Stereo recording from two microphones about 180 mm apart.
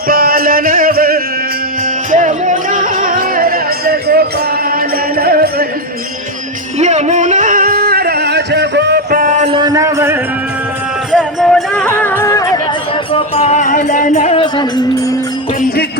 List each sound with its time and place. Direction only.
0.1 s music: 55° right (ahead or behind)
6.7 s music: 40° right (ahead or behind)
9.5 s a sound: 25° right (ahead or behind)
11.1 s music: centre (ahead or behind); by 12.5 s 15° left (ahead or behind)
13.1 s music: 35° left (ahead or behind)